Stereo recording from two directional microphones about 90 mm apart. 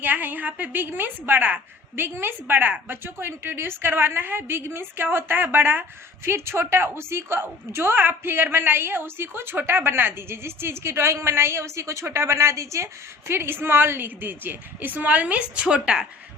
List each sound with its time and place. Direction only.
0.0 s a woman's voice: 20° right (ahead or behind)